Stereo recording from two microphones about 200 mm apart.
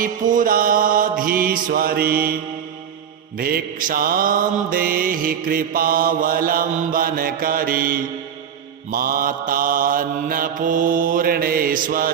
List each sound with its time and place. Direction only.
0.0 s mantra: 40° right (ahead or behind)